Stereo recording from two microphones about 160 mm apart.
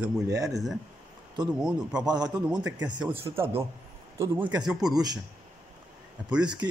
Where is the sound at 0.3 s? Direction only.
20° right (ahead or behind).